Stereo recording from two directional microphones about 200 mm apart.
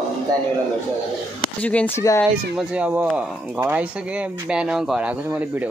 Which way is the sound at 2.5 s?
5° right (ahead or behind).